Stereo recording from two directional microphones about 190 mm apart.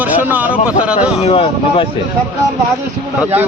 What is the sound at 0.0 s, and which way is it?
Speech, 10° right (ahead or behind).